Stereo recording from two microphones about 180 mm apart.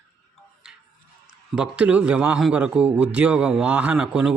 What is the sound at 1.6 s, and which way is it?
A man's voice, 5° right (ahead or behind).